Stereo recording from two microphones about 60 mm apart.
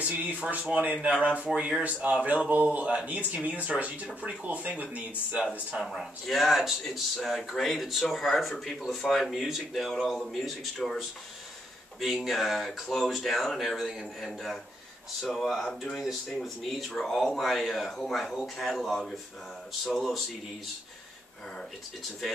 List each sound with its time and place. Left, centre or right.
0.0 s speech: right
5.8 s speech: centre
12.0 s speech: centre